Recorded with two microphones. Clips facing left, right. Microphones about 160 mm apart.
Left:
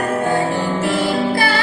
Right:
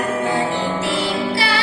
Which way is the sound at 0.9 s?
50° left (ahead or behind).